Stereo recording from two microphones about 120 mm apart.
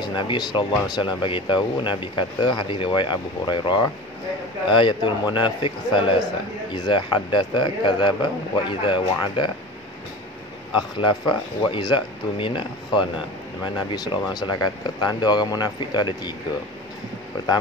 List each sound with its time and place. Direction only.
0.0 s a man's voice: 40° left (ahead or behind)
10.7 s speech: 40° left (ahead or behind)